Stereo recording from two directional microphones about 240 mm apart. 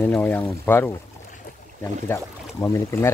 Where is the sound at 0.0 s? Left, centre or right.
Centre.